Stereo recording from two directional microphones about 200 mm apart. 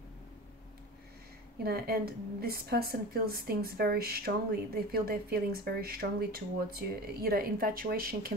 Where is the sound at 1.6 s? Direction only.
50° right (ahead or behind).